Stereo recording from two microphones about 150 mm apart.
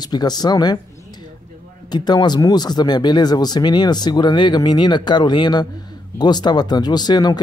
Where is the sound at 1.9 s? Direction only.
30° left (ahead or behind).